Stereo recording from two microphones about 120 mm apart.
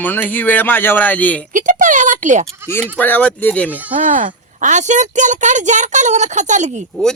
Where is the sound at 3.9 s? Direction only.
90° right.